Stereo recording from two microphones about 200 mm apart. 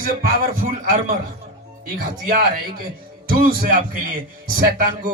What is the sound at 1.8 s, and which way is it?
A man's voice, 45° right (ahead or behind).